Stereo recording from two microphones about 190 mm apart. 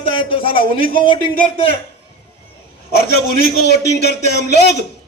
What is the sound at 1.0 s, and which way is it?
Speech, 25° left (ahead or behind).